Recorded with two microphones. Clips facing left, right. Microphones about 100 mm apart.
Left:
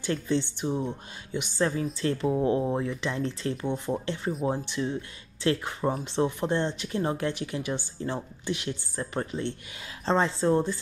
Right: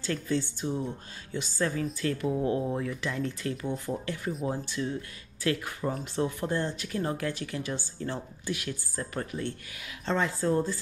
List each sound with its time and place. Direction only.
0.0 s speech: 20° left (ahead or behind)